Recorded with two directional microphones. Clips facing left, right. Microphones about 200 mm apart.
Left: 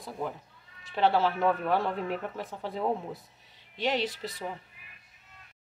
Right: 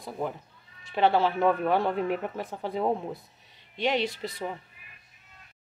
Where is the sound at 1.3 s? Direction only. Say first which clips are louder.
Right 3 dB; 25° right (ahead or behind).